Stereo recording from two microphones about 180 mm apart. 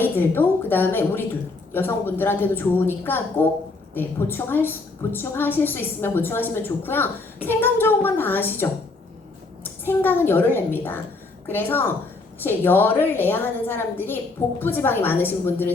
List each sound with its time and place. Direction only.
0.0 s a woman's voice: 10° left (ahead or behind)